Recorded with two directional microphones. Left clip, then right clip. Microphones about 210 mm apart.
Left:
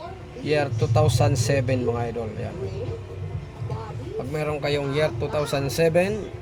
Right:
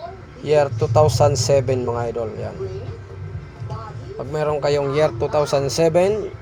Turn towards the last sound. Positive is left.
turn(degrees=-20)  # may be behind; listen again after turning